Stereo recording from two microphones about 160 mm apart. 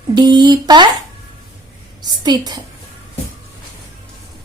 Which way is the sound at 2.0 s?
25° right (ahead or behind).